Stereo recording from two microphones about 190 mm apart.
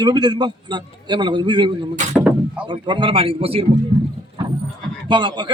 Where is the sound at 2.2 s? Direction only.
5° right (ahead or behind).